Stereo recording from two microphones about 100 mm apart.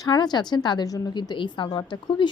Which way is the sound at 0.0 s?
45° left (ahead or behind).